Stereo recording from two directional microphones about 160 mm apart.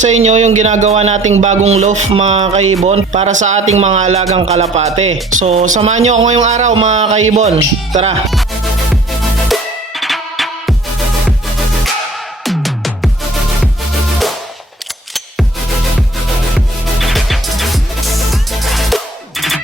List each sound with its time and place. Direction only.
0.0 s speech: 45° right (ahead or behind)
9.5 s music: centre (ahead or behind)
12.5 s music: centre (ahead or behind)
16.6 s music: centre (ahead or behind)